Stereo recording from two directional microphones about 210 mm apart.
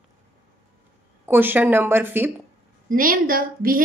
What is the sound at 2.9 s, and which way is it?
Speech, 40° right (ahead or behind).